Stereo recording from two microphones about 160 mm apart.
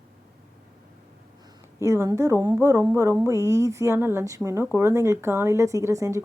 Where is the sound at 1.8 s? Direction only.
20° right (ahead or behind).